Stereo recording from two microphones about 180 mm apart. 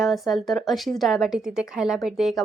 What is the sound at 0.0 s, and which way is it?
Speech, centre (ahead or behind).